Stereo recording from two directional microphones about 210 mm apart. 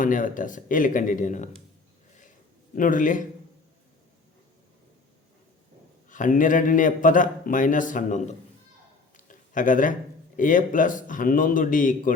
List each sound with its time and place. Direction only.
0.0 s a man's voice: 40° left (ahead or behind)
2.7 s a man's voice: 40° left (ahead or behind)
6.1 s a man's voice: 40° left (ahead or behind)
9.1 s a sound: 40° left (ahead or behind)
10.3 s a man's voice: 40° left (ahead or behind)